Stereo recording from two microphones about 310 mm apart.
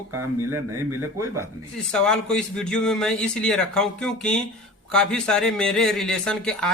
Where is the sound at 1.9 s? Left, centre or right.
Centre.